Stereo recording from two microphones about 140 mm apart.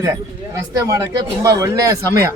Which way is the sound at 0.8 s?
25° right (ahead or behind).